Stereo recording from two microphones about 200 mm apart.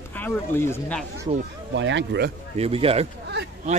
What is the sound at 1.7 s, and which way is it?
Speech, 65° right (ahead or behind).